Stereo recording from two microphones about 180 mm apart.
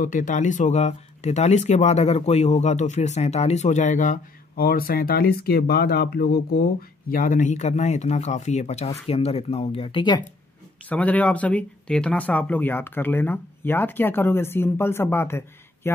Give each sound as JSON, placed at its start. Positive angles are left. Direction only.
{"t": 0.0, "sound": "speech", "side_deg": 45}
{"t": 10.9, "sound": "speech", "side_deg": 10}